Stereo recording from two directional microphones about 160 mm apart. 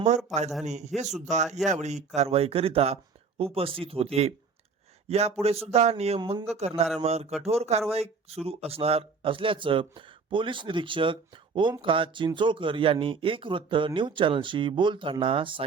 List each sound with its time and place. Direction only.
0.6 s a man's voice: 45° right (ahead or behind)